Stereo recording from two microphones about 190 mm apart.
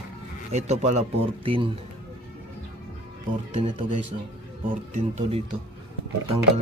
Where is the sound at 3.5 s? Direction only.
30° right (ahead or behind).